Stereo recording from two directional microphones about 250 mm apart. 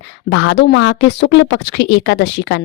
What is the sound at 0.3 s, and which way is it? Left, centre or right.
Speech, left.